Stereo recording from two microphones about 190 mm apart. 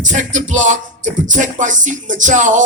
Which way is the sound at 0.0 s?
40° right (ahead or behind).